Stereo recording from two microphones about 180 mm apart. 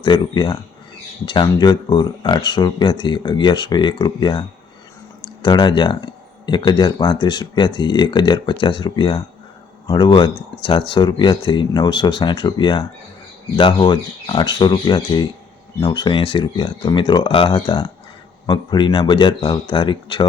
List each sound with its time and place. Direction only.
0.0 s speech: 25° left (ahead or behind)